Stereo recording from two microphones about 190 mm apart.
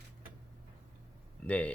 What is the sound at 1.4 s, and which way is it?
Speech, 5° left (ahead or behind).